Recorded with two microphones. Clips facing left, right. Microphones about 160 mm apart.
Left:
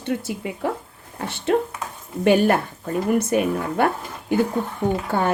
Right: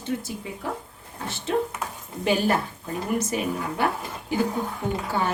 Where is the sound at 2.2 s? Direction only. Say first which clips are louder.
Left 6 dB; 60° left (ahead or behind).